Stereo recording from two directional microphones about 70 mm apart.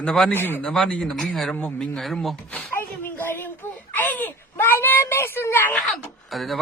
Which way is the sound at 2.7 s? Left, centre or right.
Left.